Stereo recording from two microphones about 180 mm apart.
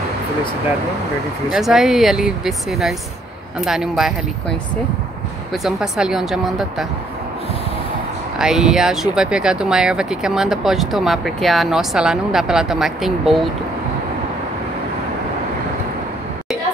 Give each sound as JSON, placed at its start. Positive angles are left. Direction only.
{"t": 1.5, "sound": "speech", "side_deg": 0}
{"t": 8.4, "sound": "speech", "side_deg": -5}